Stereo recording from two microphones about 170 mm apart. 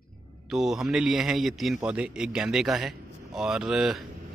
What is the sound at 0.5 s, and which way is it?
Speech, centre (ahead or behind).